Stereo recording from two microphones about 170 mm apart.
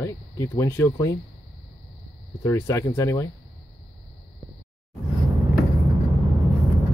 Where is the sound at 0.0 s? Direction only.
15° left (ahead or behind).